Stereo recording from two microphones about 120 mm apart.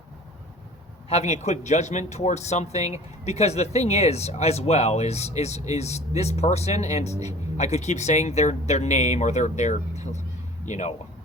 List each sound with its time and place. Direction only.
1.1 s a man's voice: 70° left (ahead or behind)